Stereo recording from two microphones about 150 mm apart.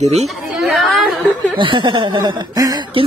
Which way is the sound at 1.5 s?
35° right (ahead or behind).